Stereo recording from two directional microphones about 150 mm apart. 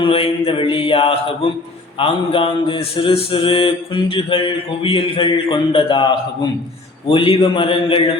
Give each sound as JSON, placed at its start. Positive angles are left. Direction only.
{"t": 0.0, "sound": "mantra", "side_deg": 40}